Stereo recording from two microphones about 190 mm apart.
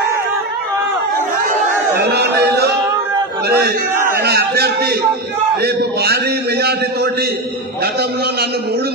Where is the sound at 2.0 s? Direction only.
55° right (ahead or behind).